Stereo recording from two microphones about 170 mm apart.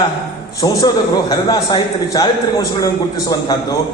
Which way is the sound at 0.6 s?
20° left (ahead or behind).